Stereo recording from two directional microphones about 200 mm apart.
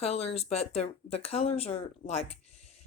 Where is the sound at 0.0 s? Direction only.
30° left (ahead or behind).